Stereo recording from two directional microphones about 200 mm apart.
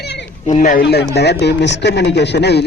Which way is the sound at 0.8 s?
55° left (ahead or behind).